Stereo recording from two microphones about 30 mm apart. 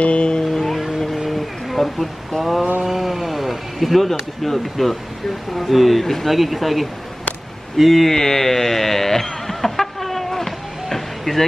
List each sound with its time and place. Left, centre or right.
0.0 s speech: left
0.5 s music: centre
0.9 s a sound: centre
2.8 s speech: centre
8.1 s music: centre